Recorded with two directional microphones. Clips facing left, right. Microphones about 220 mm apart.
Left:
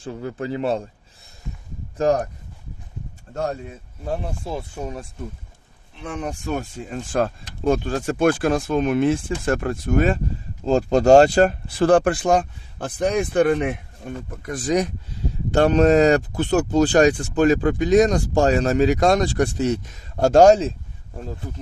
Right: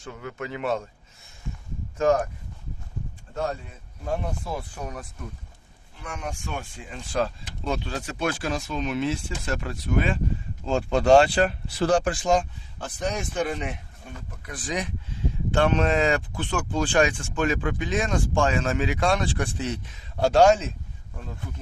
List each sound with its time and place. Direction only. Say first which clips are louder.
0.0 s speech: left 6 dB; 35° left (ahead or behind)
2.0 s speech: left 2 dB; 35° left (ahead or behind)
4.0 s speech: left 2 dB; 30° left (ahead or behind); by 13.7 s 55° left (ahead or behind)
14.3 s speech: left 10 dB; 45° left (ahead or behind)